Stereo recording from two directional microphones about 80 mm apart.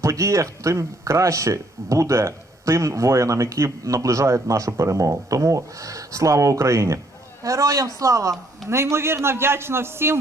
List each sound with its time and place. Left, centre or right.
0.0 s speech: right